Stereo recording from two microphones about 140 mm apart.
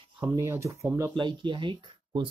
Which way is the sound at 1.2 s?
35° right (ahead or behind).